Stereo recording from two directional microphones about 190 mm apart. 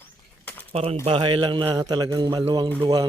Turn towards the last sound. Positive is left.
turn(degrees=-20)  # may be behind; listen again after turning